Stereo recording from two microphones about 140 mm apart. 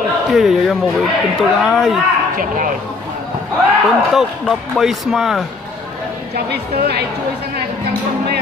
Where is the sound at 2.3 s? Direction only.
75° right (ahead or behind).